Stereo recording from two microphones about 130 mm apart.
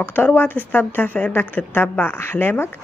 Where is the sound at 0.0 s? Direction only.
15° left (ahead or behind).